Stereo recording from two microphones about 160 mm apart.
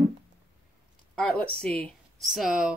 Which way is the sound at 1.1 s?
5° left (ahead or behind).